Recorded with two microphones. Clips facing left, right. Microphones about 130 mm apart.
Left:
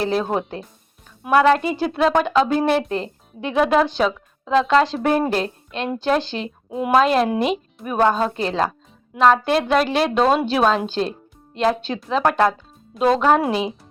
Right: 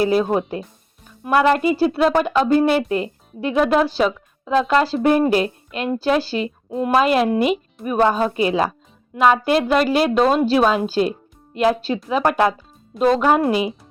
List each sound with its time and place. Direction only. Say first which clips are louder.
0.0 s speech: right 4 dB; 5° right (ahead or behind)